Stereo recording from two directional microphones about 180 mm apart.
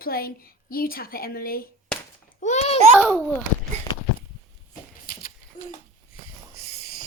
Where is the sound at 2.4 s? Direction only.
40° left (ahead or behind).